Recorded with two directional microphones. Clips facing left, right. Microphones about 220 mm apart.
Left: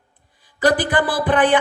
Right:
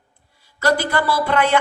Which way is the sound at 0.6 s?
15° left (ahead or behind).